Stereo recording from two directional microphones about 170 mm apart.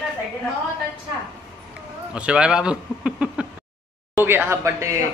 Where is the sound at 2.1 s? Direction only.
5° right (ahead or behind).